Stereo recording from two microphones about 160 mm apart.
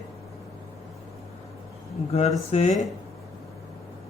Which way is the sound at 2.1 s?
40° left (ahead or behind).